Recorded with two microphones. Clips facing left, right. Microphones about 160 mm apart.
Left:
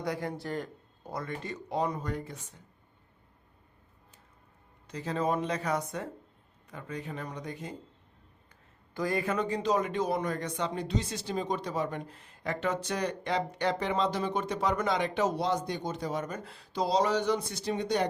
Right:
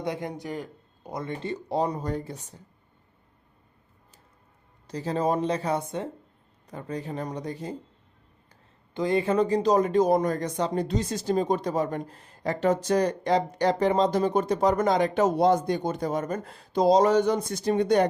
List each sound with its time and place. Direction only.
0.0 s speech: 20° right (ahead or behind)
0.5 s a sound: 5° right (ahead or behind)
1.1 s speech: 25° right (ahead or behind)
4.9 s speech: 35° right (ahead or behind)
9.0 s speech: 25° right (ahead or behind); by 18.1 s 50° right (ahead or behind)